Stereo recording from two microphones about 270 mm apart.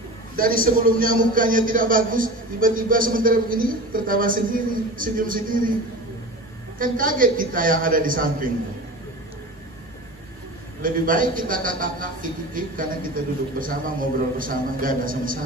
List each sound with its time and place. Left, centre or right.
0.4 s a man's voice: right
6.8 s a man's voice: right
10.8 s a man's voice: right